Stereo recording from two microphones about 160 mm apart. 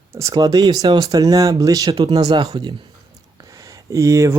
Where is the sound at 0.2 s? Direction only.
25° right (ahead or behind).